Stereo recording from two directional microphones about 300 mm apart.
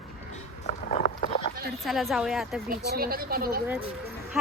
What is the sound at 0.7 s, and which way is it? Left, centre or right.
Boat, left.